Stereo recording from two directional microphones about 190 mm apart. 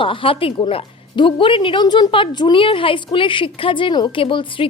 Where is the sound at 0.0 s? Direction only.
30° left (ahead or behind).